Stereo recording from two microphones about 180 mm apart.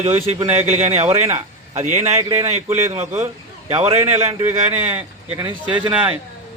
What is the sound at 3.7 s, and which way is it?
Speech, 35° right (ahead or behind).